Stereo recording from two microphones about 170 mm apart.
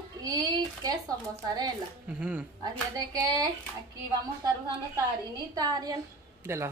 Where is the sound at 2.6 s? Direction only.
20° right (ahead or behind).